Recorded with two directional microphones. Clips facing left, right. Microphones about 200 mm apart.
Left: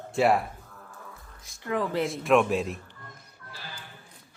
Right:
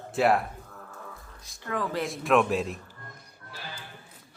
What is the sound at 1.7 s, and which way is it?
Speech, 20° left (ahead or behind).